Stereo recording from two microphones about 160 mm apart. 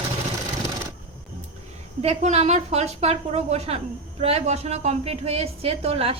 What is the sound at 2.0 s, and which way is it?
A woman's voice, 45° right (ahead or behind).